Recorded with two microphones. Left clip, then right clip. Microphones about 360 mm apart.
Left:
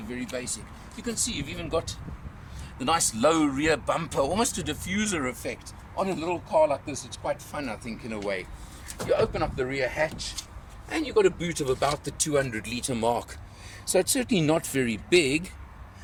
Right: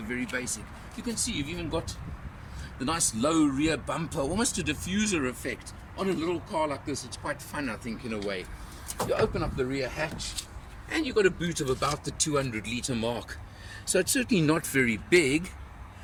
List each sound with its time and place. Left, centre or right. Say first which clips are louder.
0.1 s speech: right 1 dB; centre